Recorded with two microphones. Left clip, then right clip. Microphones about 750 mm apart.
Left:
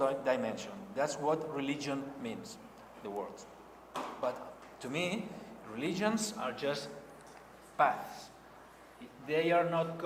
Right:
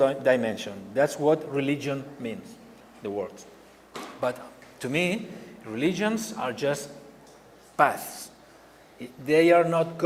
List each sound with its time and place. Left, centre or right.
0.0 s a man's voice: right
4.9 s a man's voice: right
7.8 s a man's voice: right
9.2 s a man's voice: right